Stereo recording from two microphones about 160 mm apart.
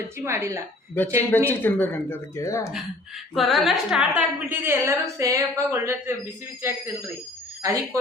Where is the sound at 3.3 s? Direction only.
Centre (ahead or behind).